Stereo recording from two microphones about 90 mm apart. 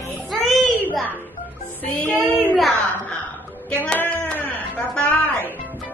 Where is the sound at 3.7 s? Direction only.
15° left (ahead or behind).